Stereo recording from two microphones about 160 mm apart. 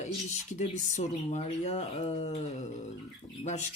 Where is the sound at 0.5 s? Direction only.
50° left (ahead or behind).